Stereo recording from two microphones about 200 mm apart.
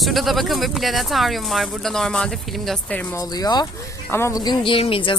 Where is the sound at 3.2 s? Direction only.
20° left (ahead or behind).